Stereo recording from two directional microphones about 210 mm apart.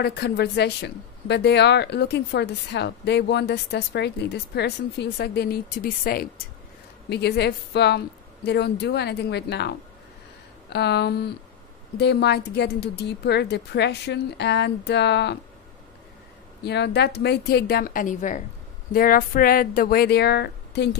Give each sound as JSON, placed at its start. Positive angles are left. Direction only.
{"t": 0.0, "sound": "speech", "side_deg": 50}
{"t": 16.6, "sound": "speech", "side_deg": 55}